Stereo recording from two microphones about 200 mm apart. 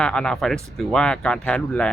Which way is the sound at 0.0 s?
5° left (ahead or behind).